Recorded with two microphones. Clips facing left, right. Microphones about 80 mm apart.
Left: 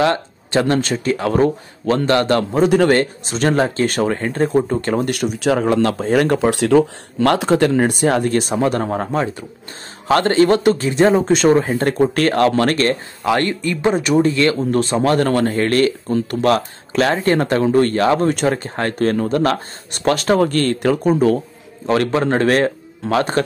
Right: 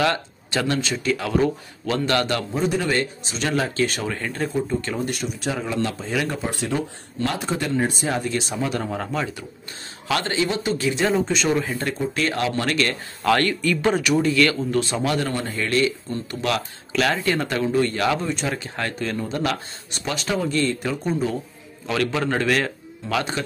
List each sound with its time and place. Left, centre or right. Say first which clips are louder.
0.0 s speech: left 5 dB; left
0.7 s speech: left 5 dB; left
2.6 s speech: left 9 dB; left
4.5 s speech: left 7 dB; left
6.3 s speech: left 12 dB; left
9.0 s speech: left 6 dB; left
10.9 s speech: left 6 dB; left
13.2 s speech: left 1 dB; left
14.0 s speech: left 5 dB; left
14.7 s speech: left 6 dB; left
16.4 s speech: left 7 dB; left
21.8 s speech: left 7 dB; left